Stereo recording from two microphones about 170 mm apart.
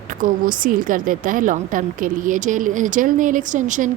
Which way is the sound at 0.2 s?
55° right (ahead or behind).